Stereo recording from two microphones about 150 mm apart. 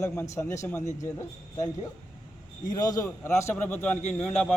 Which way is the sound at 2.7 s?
25° left (ahead or behind).